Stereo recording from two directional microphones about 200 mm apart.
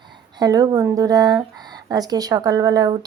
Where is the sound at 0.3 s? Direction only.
20° right (ahead or behind).